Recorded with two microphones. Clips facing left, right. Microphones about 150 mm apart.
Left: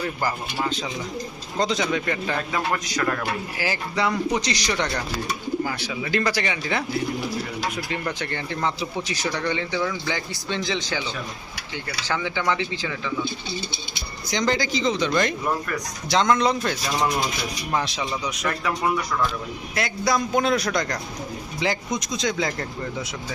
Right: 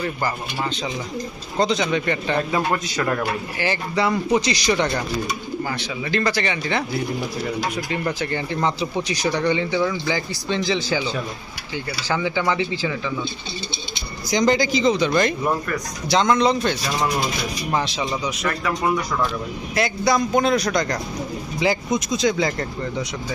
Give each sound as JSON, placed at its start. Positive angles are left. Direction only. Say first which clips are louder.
{"t": 0.2, "sound": "speech", "louder": "right 1 dB", "side_deg": 5}
{"t": 2.3, "sound": "a man's voice", "louder": "right 6 dB", "side_deg": -25}
{"t": 3.6, "sound": "speech", "louder": "right 3 dB", "side_deg": 0}
{"t": 5.6, "sound": "speech", "louder": "right 1 dB", "side_deg": 10}
{"t": 7.9, "sound": "speech", "louder": "right 4 dB", "side_deg": -5}
{"t": 8.6, "sound": "speech", "louder": "right 3 dB", "side_deg": -15}
{"t": 12.0, "sound": "speech", "louder": "right 3 dB", "side_deg": -10}
{"t": 14.3, "sound": "speech", "louder": "right 5 dB", "side_deg": -15}
{"t": 19.7, "sound": "speech", "louder": "right 4 dB", "side_deg": 0}